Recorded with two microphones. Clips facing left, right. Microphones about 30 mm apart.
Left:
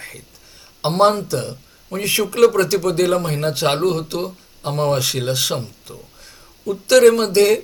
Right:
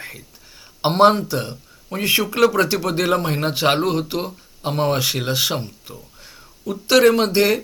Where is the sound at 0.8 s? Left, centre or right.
Centre.